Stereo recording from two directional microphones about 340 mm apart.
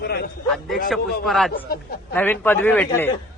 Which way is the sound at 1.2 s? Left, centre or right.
Centre.